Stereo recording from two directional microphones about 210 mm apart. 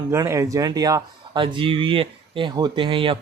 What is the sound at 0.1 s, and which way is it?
Speech, 15° right (ahead or behind).